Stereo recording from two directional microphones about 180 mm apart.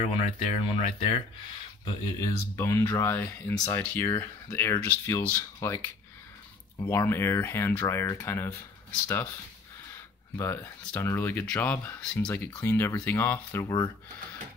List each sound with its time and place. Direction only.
0.1 s speech: 35° left (ahead or behind)
2.1 s speech: 15° left (ahead or behind)
6.8 s speech: 15° left (ahead or behind)
10.3 s speech: 15° left (ahead or behind)